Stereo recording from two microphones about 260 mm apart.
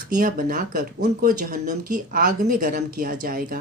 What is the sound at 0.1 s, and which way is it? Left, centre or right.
Speech, right.